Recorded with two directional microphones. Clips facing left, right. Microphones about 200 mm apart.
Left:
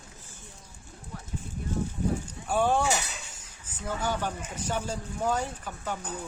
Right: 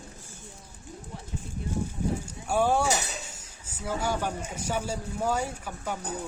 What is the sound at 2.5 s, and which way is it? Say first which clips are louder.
Speech: right 1 dB; 10° right (ahead or behind).